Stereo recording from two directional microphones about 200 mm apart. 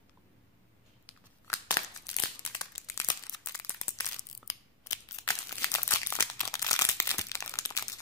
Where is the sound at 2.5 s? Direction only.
15° left (ahead or behind).